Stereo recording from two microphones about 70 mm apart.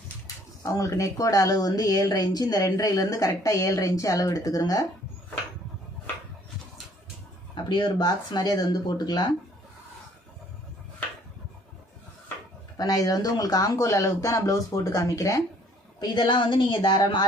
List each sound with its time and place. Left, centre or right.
0.6 s speech: left
7.5 s speech: left
12.7 s speech: left
16.0 s speech: left